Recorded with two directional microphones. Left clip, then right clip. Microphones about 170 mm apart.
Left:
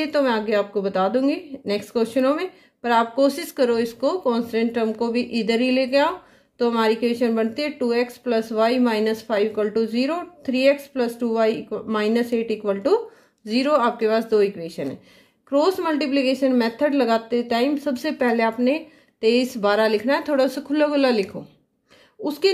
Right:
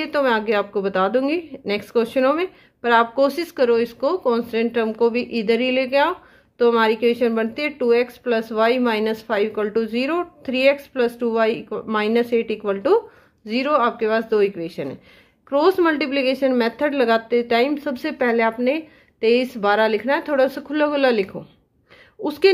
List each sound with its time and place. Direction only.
0.0 s speech: 20° right (ahead or behind)
22.2 s speech: 30° right (ahead or behind)